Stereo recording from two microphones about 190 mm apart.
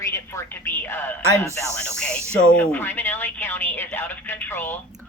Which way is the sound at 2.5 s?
10° left (ahead or behind).